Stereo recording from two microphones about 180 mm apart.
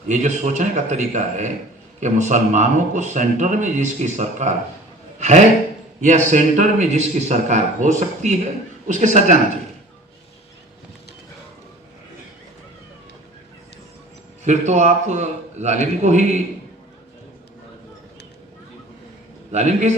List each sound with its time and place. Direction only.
0.1 s a man's voice: 40° right (ahead or behind)
14.4 s a man's voice: 40° right (ahead or behind)
19.5 s a man's voice: 40° right (ahead or behind)